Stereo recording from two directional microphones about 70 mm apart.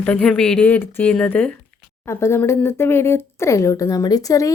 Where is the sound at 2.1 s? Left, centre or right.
Left.